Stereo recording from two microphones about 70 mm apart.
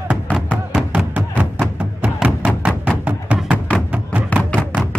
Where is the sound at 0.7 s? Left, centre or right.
Centre.